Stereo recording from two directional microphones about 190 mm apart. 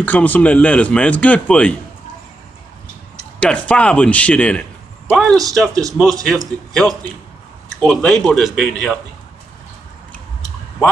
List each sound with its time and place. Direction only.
0.0 s speech: 10° left (ahead or behind)
3.3 s a man's voice: 5° left (ahead or behind)
5.7 s a man's voice: 20° right (ahead or behind)
6.7 s speech: centre (ahead or behind)
10.1 s a sound: 5° left (ahead or behind)